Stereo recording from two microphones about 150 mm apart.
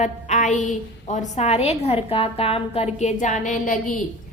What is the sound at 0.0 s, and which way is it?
A woman's voice, 55° left (ahead or behind).